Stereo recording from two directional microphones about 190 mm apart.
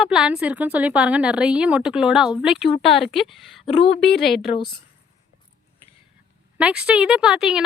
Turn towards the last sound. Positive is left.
turn(degrees=0)  # may be behind; listen again after turning